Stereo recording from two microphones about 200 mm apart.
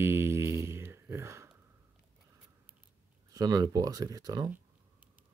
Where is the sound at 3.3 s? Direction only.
20° right (ahead or behind).